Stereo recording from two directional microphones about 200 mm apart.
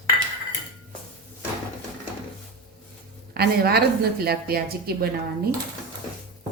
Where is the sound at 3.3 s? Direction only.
50° right (ahead or behind).